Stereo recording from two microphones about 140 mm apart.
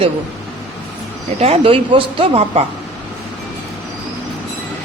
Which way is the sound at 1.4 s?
45° right (ahead or behind).